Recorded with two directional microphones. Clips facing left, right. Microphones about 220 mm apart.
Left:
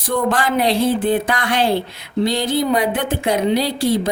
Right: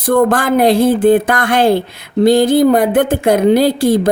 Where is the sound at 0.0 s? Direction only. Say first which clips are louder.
Right 7 dB; 50° right (ahead or behind).